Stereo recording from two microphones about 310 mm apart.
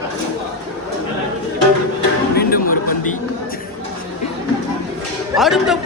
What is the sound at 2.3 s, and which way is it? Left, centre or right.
Music, left.